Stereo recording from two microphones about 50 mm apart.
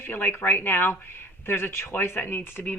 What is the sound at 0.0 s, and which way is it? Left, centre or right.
Speech, left.